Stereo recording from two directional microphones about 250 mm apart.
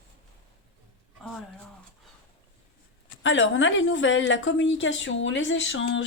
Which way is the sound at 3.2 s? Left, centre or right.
Left.